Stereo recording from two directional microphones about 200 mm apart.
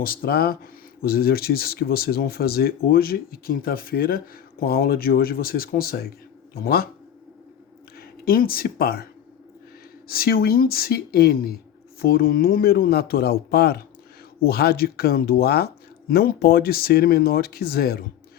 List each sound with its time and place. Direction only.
0.0 s speech: 45° left (ahead or behind)
7.9 s speech: 45° left (ahead or behind)
10.1 s speech: 50° left (ahead or behind)